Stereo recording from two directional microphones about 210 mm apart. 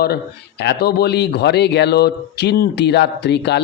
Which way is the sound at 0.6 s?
50° left (ahead or behind).